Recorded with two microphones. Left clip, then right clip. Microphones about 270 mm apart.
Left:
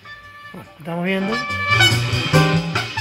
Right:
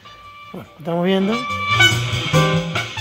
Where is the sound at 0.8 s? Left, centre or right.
Right.